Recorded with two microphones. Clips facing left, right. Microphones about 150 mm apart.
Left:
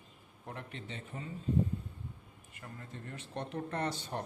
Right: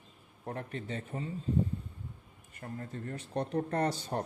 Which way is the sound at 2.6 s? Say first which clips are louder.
Right 7 dB; 40° right (ahead or behind).